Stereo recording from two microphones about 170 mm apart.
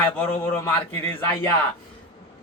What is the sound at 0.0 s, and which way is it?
Speech, 10° left (ahead or behind).